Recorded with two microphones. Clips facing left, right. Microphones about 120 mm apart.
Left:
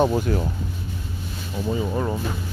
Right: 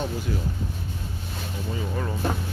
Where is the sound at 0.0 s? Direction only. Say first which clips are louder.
Left 9 dB; 60° left (ahead or behind).